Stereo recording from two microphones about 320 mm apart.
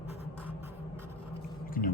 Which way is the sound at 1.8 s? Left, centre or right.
Left.